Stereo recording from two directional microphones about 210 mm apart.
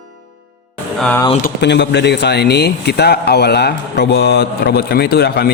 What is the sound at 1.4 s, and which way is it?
Speech, 50° left (ahead or behind).